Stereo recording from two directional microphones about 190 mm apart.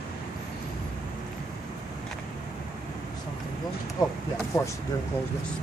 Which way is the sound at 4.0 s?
20° left (ahead or behind).